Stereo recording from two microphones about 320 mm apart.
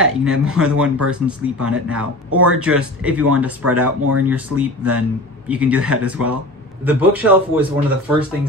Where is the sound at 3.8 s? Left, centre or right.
Right.